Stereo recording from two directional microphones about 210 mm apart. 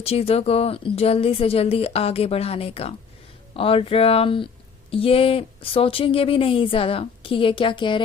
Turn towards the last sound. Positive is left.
turn(degrees=25)  # may be behind; listen again after turning